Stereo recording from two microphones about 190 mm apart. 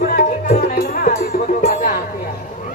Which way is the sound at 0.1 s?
45° left (ahead or behind).